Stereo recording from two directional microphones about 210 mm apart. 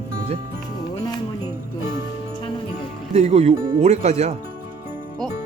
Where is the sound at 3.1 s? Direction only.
30° right (ahead or behind).